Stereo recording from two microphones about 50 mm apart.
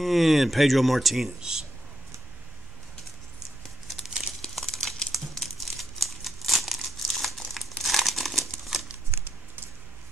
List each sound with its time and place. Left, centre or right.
0.0 s speech: centre
1.4 s speech: centre
3.8 s crumpling: centre
4.4 s crumpling: centre
9.1 s crumpling: right